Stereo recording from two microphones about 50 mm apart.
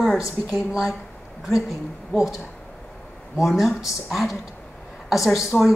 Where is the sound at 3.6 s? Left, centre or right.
Centre.